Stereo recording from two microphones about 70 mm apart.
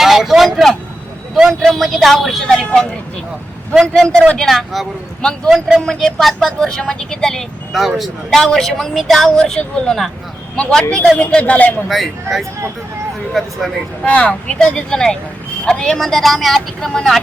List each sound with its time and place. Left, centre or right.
0.0 s vehicle: centre
3.8 s speech: centre
7.7 s speech: centre
11.2 s speech: centre
11.9 s speech: centre
14.0 s speech: centre